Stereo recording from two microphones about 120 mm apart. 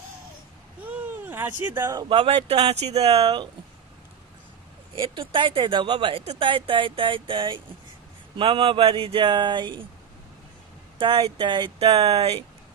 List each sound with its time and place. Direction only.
0.8 s a sound: 15° right (ahead or behind)
2.0 s speech: 45° right (ahead or behind); by 3.0 s 60° right (ahead or behind)
3.0 s speech: 35° right (ahead or behind)
4.9 s speech: 45° right (ahead or behind)
11.0 s speech: 45° right (ahead or behind)
11.8 s speech: 60° right (ahead or behind)